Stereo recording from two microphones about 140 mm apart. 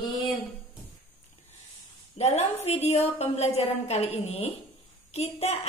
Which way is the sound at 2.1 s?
50° left (ahead or behind).